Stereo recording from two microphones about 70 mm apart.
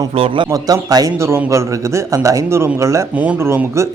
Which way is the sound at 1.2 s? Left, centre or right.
Right.